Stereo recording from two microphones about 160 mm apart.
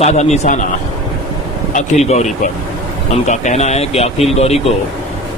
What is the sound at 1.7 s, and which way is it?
A man's voice, 45° left (ahead or behind).